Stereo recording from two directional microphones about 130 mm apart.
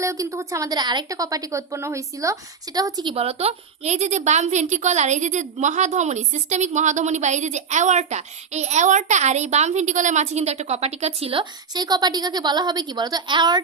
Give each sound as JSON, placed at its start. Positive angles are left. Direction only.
{"t": 0.0, "sound": "a woman's voice", "side_deg": -25}
{"t": 3.2, "sound": "a woman's voice", "side_deg": -50}
{"t": 11.7, "sound": "a woman's voice", "side_deg": -30}